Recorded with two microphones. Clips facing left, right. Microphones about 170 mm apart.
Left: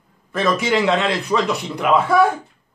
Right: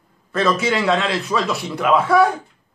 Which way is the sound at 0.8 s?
Centre (ahead or behind).